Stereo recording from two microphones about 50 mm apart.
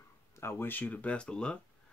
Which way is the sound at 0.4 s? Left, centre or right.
Left.